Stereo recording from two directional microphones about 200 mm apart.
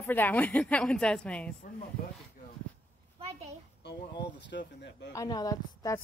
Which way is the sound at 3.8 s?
60° left (ahead or behind).